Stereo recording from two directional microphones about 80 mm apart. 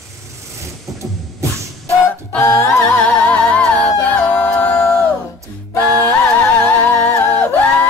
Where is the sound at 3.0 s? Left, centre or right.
Centre.